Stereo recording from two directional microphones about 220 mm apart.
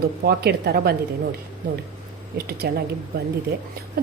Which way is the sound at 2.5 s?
45° right (ahead or behind).